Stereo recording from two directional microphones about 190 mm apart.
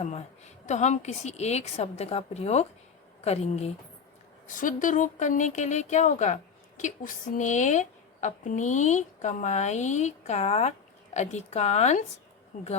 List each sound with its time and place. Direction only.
0.6 s speech: 40° left (ahead or behind)